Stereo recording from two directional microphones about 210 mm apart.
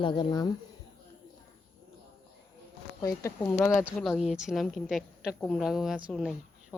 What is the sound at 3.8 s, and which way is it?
Speech, centre (ahead or behind).